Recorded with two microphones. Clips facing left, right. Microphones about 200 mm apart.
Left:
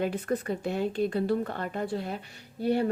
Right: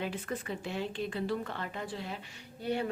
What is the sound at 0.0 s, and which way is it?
A woman's voice, 45° left (ahead or behind).